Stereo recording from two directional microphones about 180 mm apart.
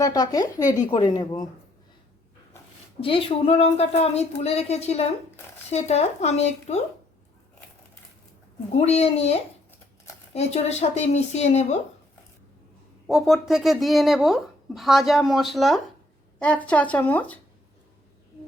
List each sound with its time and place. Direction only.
0.0 s speech: 20° left (ahead or behind)
3.0 s a woman's voice: 30° left (ahead or behind)
8.7 s a woman's voice: 35° left (ahead or behind)
13.1 s a woman's voice: centre (ahead or behind)